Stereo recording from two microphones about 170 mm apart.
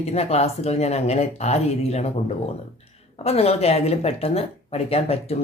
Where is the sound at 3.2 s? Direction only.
35° left (ahead or behind).